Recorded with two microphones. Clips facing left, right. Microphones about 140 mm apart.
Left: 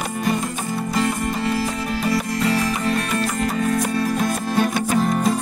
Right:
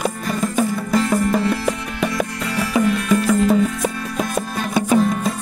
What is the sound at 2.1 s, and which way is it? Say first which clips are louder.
Music: left 3 dB; 30° left (ahead or behind).